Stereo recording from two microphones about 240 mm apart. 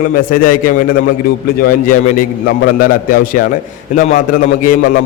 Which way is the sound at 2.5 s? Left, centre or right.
Left.